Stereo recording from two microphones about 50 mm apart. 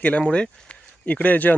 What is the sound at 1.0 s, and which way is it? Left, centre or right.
Speech, left.